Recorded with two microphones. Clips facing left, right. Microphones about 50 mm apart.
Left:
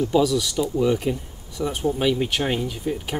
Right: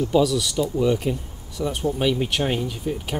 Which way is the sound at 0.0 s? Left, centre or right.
Centre.